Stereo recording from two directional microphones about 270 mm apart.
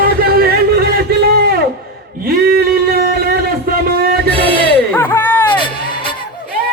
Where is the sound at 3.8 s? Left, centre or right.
Right.